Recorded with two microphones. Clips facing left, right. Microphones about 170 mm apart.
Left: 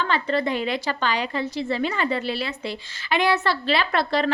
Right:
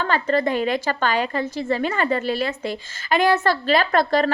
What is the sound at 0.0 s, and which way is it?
A woman's voice, 45° right (ahead or behind).